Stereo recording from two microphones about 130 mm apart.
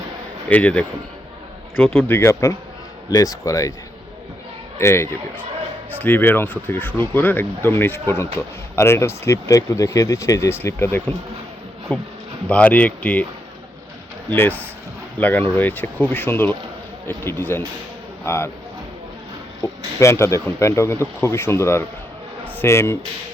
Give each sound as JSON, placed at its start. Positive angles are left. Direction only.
{"t": 0.4, "sound": "speech", "side_deg": 10}
{"t": 4.8, "sound": "speech", "side_deg": 20}
{"t": 14.3, "sound": "speech", "side_deg": 15}
{"t": 19.6, "sound": "speech", "side_deg": 20}